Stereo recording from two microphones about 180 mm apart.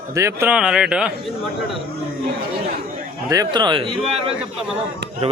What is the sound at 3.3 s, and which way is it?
Speech, 20° right (ahead or behind).